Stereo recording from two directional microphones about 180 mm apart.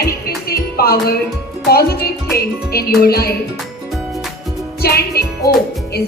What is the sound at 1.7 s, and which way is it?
Music, 60° left (ahead or behind).